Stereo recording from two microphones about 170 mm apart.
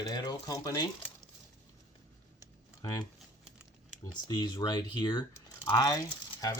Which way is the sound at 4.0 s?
25° left (ahead or behind).